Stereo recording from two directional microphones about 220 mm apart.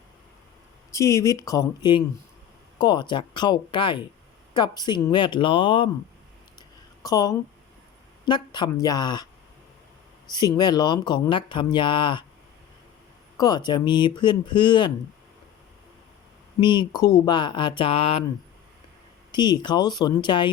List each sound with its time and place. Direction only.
0.9 s speech: 15° left (ahead or behind)
6.6 s a sound: 15° left (ahead or behind)
8.2 s speech: 20° left (ahead or behind)
10.3 s speech: 20° left (ahead or behind)
13.3 s speech: 20° left (ahead or behind)
16.6 s speech: 20° left (ahead or behind)
19.3 s speech: 20° left (ahead or behind)